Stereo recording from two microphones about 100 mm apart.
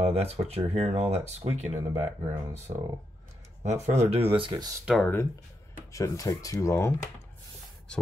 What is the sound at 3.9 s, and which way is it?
Speech, 90° right.